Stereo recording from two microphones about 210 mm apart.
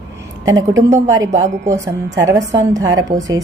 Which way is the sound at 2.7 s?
15° right (ahead or behind).